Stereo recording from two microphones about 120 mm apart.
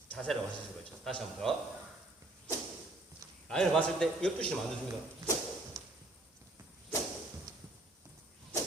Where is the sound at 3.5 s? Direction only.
5° left (ahead or behind).